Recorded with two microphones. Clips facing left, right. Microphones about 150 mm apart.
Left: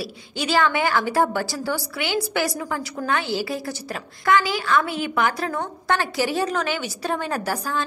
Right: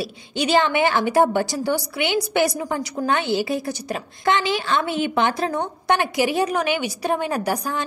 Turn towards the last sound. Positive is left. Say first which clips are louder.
# right 2 dB
turn(degrees=-15)  # may be behind; listen again after turning